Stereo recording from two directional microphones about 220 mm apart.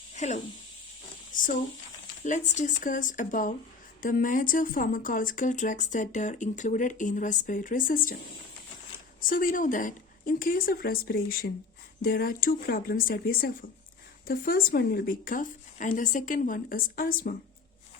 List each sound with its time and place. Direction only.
0.1 s a sound: 35° left (ahead or behind)
1.3 s speech: 35° left (ahead or behind)
9.2 s speech: 40° left (ahead or behind)